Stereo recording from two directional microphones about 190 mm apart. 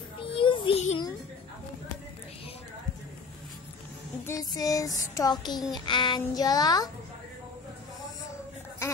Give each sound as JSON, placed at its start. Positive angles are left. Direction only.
{"t": 0.3, "sound": "child singing", "side_deg": 25}
{"t": 4.3, "sound": "music", "side_deg": 20}